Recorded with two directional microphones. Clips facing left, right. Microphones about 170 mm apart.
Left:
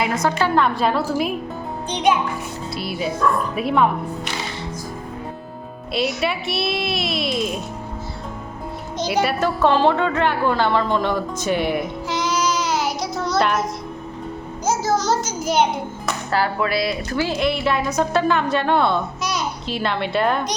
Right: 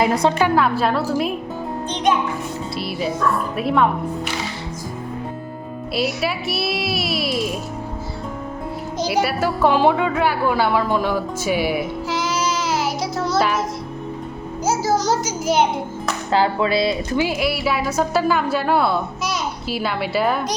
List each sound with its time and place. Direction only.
0.0 s a woman's voice: 35° right (ahead or behind)
0.3 s a woman's voice: 10° right (ahead or behind)
2.7 s a woman's voice: centre (ahead or behind)
5.9 s a woman's voice: 5° right (ahead or behind)
9.0 s a woman's voice: 5° right (ahead or behind)
14.6 s music: 10° right (ahead or behind)
16.3 s speech: 25° right (ahead or behind)
17.2 s a woman's voice: 5° right (ahead or behind)